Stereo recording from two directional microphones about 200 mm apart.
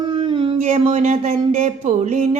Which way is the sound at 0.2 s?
25° right (ahead or behind).